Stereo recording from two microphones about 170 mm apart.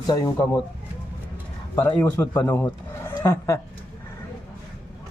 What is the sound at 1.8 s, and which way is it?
A man's voice, 10° left (ahead or behind).